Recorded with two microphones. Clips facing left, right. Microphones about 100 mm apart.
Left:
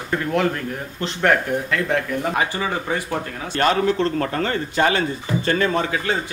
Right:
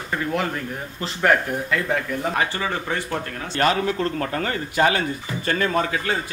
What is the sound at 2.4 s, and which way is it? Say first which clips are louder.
Speech: left 1 dB; 15° left (ahead or behind).